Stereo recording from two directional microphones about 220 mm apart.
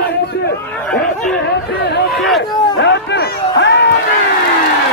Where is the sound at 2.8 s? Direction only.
55° left (ahead or behind).